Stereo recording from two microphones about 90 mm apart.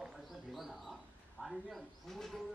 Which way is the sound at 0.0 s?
Centre (ahead or behind).